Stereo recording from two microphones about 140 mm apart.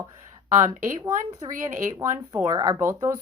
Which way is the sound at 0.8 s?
20° right (ahead or behind).